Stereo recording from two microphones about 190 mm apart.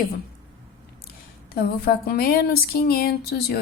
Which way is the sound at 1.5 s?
55° left (ahead or behind).